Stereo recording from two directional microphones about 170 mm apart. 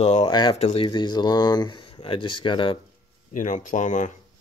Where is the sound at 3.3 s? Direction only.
50° left (ahead or behind).